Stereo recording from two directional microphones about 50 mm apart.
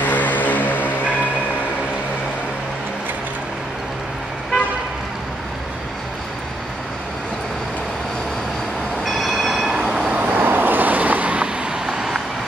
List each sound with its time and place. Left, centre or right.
0.0 s music: left
9.0 s train: centre
9.9 s vehicle: right
10.2 s vehicle: right; by 12.2 s centre